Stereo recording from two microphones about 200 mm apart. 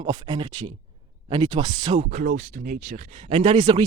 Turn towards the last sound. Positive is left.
turn(degrees=-20)  # may be behind; listen again after turning